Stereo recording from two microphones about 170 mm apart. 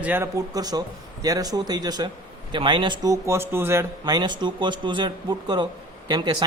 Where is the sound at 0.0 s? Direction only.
15° right (ahead or behind).